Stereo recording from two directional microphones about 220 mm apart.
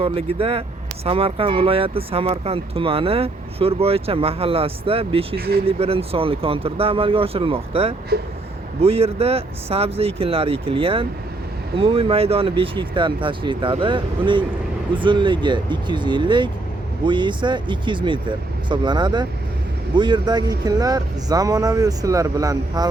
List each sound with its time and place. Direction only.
0.0 s speech: 25° right (ahead or behind)